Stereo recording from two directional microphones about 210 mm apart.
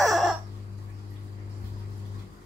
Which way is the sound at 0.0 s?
Centre (ahead or behind).